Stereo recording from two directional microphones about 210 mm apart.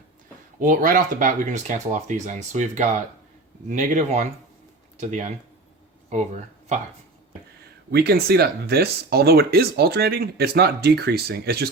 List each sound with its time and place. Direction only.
0.6 s speech: 40° right (ahead or behind)
7.9 s speech: 50° right (ahead or behind)